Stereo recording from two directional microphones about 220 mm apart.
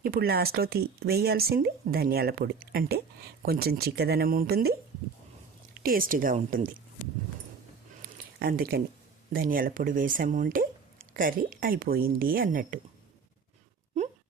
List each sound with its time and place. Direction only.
0.0 s speech: 45° right (ahead or behind)
5.8 s speech: 40° right (ahead or behind)
8.4 s speech: 40° right (ahead or behind)
14.0 s wail: 30° right (ahead or behind)